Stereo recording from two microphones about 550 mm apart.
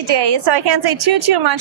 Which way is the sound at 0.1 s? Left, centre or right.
Right.